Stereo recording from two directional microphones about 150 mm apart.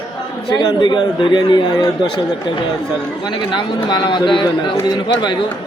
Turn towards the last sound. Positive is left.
turn(degrees=30)  # may be behind; listen again after turning